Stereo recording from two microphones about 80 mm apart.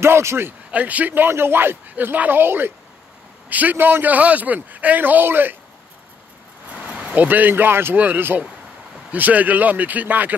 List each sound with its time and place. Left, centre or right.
0.0 s speech: right
0.7 s a man's voice: centre
6.7 s a man's voice: centre